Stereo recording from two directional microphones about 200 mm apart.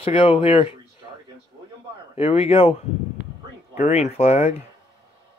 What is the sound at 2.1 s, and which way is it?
Speech, 30° left (ahead or behind).